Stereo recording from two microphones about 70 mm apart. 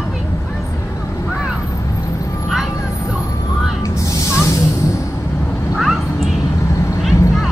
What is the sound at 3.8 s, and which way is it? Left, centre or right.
Snake, left.